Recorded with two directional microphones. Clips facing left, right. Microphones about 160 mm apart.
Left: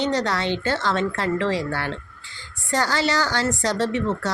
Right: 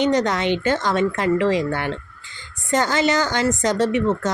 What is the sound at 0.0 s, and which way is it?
A woman's voice, 20° right (ahead or behind).